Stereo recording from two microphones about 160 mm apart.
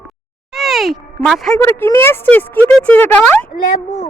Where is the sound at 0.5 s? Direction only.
Centre (ahead or behind).